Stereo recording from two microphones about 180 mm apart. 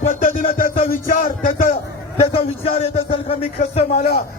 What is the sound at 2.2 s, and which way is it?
A man's voice, 35° left (ahead or behind).